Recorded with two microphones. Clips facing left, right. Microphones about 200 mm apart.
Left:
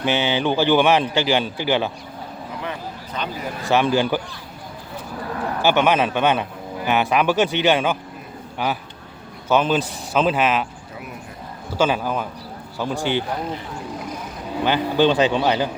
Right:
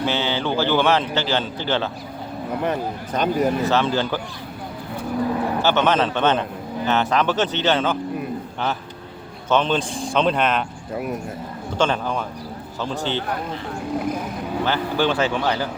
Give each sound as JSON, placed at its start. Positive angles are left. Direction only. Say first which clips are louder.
{"t": 0.0, "sound": "a man's voice", "louder": "left 2 dB", "side_deg": 15}
{"t": 2.6, "sound": "speech", "louder": "right 7 dB", "side_deg": -50}
{"t": 3.7, "sound": "a man's voice", "louder": "left 2 dB", "side_deg": 15}
{"t": 5.6, "sound": "a man's voice", "louder": "left 2 dB", "side_deg": 15}
{"t": 9.5, "sound": "a man's voice", "louder": "left 1 dB", "side_deg": 5}
{"t": 10.9, "sound": "speech", "louder": "right 11 dB", "side_deg": -50}
{"t": 11.8, "sound": "a man's voice", "louder": "left 1 dB", "side_deg": 5}
{"t": 14.6, "sound": "a man's voice", "louder": "left 4 dB", "side_deg": 15}